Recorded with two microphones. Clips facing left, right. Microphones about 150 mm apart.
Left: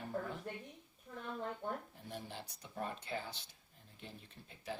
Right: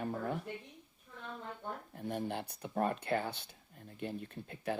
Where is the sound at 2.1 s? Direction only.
60° right (ahead or behind).